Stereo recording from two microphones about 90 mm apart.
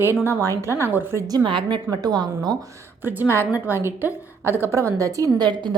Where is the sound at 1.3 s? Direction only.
60° right (ahead or behind).